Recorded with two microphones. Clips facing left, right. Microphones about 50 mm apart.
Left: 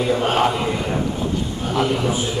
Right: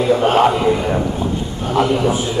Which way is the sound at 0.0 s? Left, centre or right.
Centre.